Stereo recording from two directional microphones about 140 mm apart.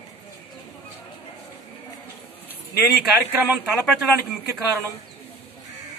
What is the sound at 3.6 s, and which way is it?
Speech, centre (ahead or behind).